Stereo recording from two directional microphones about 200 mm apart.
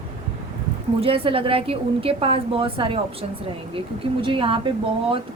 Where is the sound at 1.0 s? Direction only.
30° right (ahead or behind).